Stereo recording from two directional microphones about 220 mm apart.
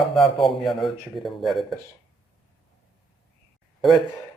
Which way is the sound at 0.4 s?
Centre (ahead or behind).